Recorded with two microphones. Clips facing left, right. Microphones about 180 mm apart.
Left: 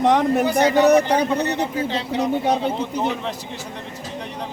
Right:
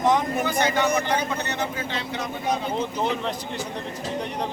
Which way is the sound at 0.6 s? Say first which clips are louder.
Left 9 dB; 35° left (ahead or behind).